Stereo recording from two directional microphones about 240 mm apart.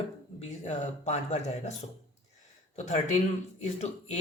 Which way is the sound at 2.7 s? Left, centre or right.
Left.